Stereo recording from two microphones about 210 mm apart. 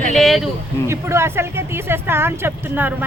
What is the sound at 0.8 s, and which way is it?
Speech, 15° right (ahead or behind).